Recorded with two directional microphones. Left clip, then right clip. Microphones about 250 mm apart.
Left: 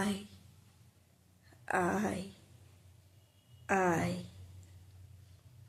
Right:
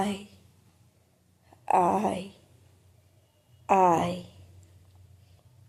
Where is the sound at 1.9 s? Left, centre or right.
Centre.